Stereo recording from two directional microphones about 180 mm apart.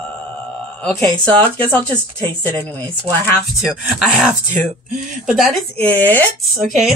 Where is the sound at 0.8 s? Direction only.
10° left (ahead or behind).